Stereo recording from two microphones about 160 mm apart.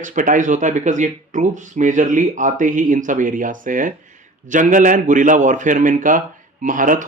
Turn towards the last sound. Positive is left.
turn(degrees=-55)  # may be behind; listen again after turning